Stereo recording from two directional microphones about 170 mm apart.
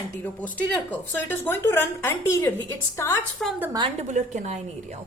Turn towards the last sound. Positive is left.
turn(degrees=-40)  # may be behind; listen again after turning